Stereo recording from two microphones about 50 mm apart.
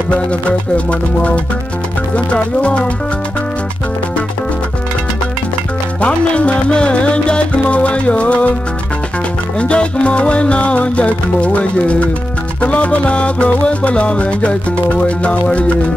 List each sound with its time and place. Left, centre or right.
0.1 s music: left
5.9 s music: left
9.6 s music: left